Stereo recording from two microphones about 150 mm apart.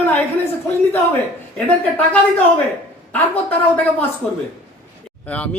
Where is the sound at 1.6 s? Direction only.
10° left (ahead or behind).